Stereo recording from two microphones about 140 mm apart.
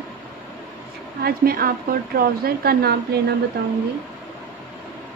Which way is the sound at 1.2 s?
90° right.